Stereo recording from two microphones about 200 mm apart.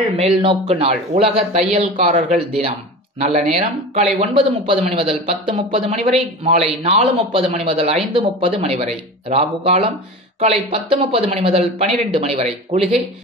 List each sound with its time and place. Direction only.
0.4 s speech: 30° right (ahead or behind)